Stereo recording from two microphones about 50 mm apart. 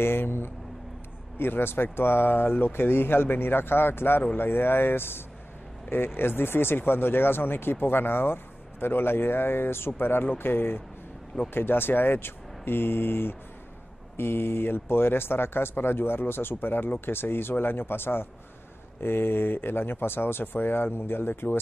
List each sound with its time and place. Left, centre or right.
0.0 s speech: left